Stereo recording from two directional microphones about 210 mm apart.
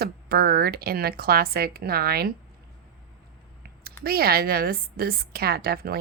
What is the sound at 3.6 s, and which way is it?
A woman's voice, 45° right (ahead or behind).